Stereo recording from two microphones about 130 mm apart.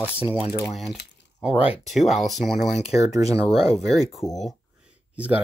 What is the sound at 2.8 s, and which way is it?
Speech, 55° left (ahead or behind).